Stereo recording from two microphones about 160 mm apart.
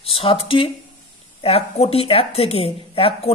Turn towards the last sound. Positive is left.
turn(degrees=35)  # may be behind; listen again after turning